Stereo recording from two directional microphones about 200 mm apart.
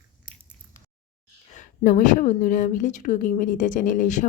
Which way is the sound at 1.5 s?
40° left (ahead or behind).